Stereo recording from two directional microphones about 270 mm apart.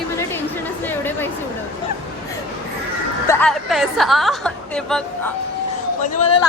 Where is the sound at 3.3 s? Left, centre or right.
Centre.